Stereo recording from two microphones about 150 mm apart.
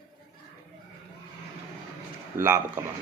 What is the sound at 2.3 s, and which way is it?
Speech, 15° right (ahead or behind).